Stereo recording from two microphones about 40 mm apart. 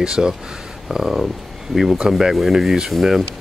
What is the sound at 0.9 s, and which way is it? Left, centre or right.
Speech, centre.